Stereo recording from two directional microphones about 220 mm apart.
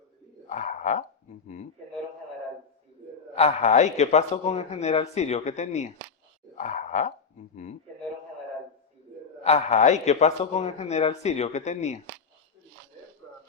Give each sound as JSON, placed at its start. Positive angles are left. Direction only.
{"t": 0.4, "sound": "a sound", "side_deg": 35}
{"t": 3.3, "sound": "a man's voice", "side_deg": 30}
{"t": 9.4, "sound": "a man's voice", "side_deg": 30}